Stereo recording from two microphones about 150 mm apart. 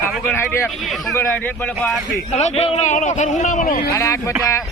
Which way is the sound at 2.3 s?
45° left (ahead or behind).